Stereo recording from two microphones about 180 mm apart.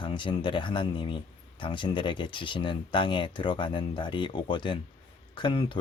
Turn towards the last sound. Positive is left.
turn(degrees=25)  # may be behind; listen again after turning